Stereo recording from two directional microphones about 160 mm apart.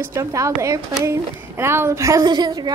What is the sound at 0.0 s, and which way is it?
A woman's voice, 20° right (ahead or behind).